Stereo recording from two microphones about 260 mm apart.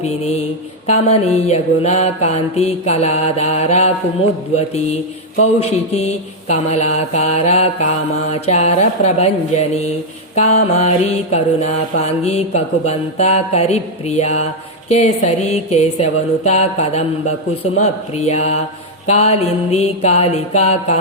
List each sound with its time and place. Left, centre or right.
0.0 s mantra: left